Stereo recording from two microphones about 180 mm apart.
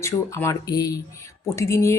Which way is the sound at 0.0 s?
15° left (ahead or behind).